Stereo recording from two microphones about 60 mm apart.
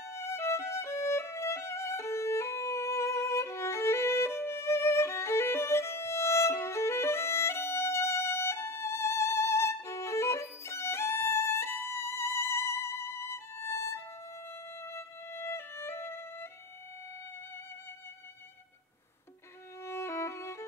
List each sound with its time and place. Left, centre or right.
0.0 s violin: left
14.8 s music: left
19.8 s violin: left